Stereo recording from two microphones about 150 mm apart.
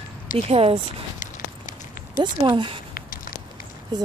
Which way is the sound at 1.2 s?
60° left (ahead or behind).